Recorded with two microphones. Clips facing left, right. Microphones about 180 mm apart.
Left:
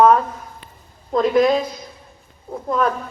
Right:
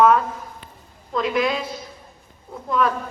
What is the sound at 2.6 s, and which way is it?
Speech, 40° left (ahead or behind).